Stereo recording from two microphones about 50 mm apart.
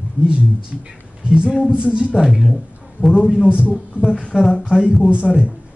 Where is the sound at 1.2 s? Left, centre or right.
Centre.